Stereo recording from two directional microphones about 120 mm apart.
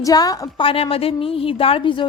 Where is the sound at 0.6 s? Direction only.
50° left (ahead or behind).